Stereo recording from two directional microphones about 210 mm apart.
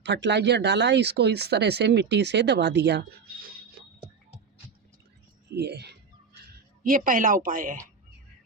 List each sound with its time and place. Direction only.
0.0 s speech: 55° right (ahead or behind)
5.5 s speech: 50° right (ahead or behind)
6.8 s speech: 40° right (ahead or behind)